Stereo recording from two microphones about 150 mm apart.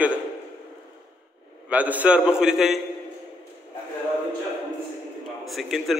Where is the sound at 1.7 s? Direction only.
10° right (ahead or behind).